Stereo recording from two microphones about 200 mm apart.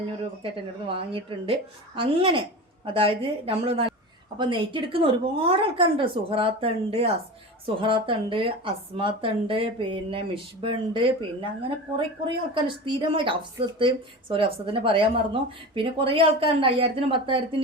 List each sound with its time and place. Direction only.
0.4 s a woman's voice: 25° right (ahead or behind)
12.5 s a woman's voice: 25° right (ahead or behind)